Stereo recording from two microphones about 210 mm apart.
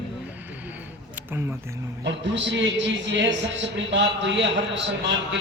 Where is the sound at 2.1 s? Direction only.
55° right (ahead or behind).